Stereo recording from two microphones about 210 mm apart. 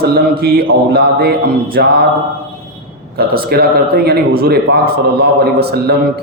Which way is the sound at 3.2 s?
45° right (ahead or behind).